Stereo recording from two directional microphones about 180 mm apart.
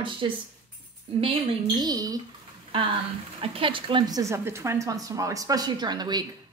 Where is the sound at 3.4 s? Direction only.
30° right (ahead or behind).